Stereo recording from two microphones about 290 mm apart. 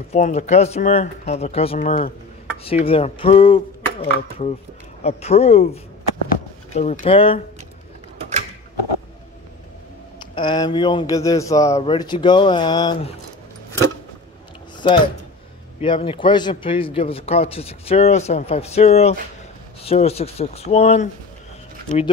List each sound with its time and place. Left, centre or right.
0.1 s a man's voice: left
8.2 s creak: right
10.3 s speech: centre
14.8 s a man's voice: centre